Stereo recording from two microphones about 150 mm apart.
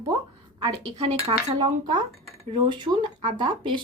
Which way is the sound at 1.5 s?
30° right (ahead or behind).